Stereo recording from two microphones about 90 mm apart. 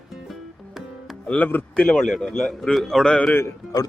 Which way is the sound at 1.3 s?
20° left (ahead or behind).